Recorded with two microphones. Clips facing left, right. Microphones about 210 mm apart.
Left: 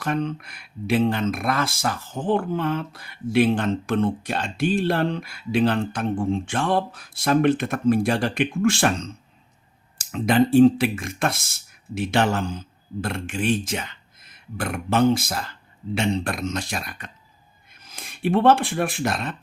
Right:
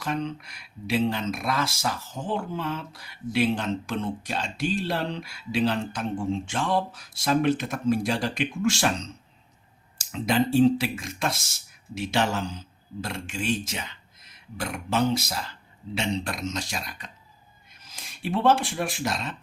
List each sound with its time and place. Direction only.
0.0 s speech: 55° left (ahead or behind)